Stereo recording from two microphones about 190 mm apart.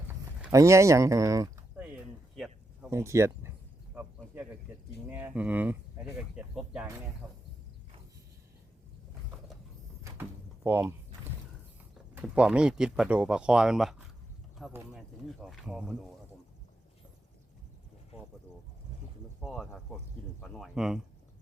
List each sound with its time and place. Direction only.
0.1 s a sound: 15° right (ahead or behind)
2.3 s a sound: centre (ahead or behind)
2.9 s speech: 15° right (ahead or behind)
3.9 s cricket: 10° right (ahead or behind)
5.0 s speech: 10° right (ahead or behind)
7.2 s speech: 15° right (ahead or behind)
10.0 s a sound: 15° right (ahead or behind)
12.1 s speech: 5° right (ahead or behind)
19.4 s speech: centre (ahead or behind)